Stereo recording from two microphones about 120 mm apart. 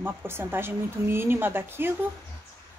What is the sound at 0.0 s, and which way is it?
A woman's voice, 20° right (ahead or behind).